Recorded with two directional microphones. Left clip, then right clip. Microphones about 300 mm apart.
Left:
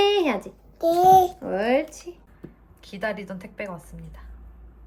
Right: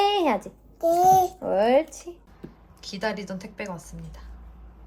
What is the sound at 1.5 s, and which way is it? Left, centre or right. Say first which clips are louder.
Speech: right 3 dB; centre.